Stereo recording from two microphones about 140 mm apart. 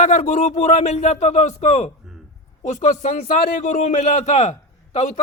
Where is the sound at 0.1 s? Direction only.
60° left (ahead or behind).